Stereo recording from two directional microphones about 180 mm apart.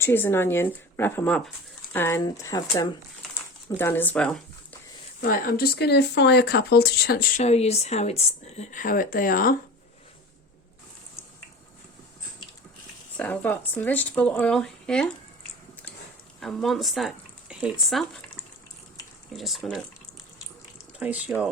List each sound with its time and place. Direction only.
0.0 s speech: 10° left (ahead or behind)
5.2 s speech: 55° left (ahead or behind)
7.4 s a woman's voice: 35° left (ahead or behind); by 9.6 s 50° left (ahead or behind)
13.1 s speech: 10° left (ahead or behind)
16.4 s speech: centre (ahead or behind)
19.4 s speech: centre (ahead or behind)
21.0 s speech: 10° right (ahead or behind)